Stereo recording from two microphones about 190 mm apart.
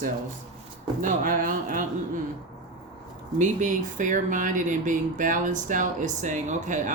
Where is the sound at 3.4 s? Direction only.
40° right (ahead or behind).